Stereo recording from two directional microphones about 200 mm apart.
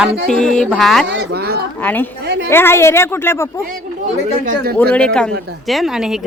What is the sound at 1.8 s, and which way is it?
Speech, 10° left (ahead or behind).